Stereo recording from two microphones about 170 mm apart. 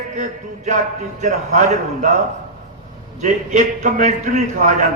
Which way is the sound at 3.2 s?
45° right (ahead or behind).